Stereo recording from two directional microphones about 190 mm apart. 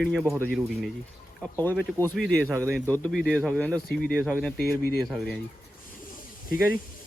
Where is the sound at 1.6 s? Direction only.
10° left (ahead or behind).